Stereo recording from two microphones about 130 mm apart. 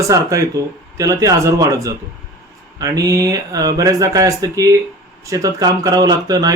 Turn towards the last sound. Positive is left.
turn(degrees=-30)  # may be behind; listen again after turning